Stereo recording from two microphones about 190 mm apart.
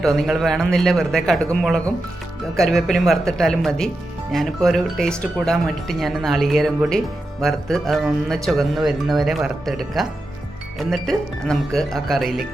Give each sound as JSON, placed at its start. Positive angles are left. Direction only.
{"t": 0.0, "sound": "speech", "side_deg": 0}